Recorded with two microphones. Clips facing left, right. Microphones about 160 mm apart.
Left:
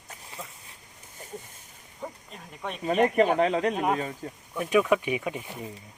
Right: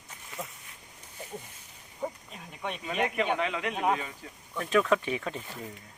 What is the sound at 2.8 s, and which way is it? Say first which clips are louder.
Speech: left 8 dB; 40° left (ahead or behind).